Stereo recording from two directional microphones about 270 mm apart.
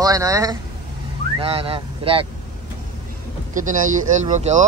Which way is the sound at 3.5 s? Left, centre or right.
Right.